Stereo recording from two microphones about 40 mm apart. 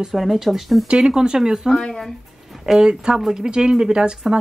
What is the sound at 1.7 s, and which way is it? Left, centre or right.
Speech, centre.